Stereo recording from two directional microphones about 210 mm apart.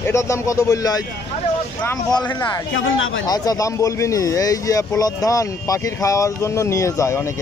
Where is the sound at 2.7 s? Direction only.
65° left (ahead or behind).